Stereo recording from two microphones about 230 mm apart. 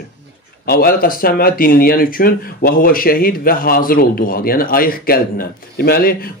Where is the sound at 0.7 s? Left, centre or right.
Left.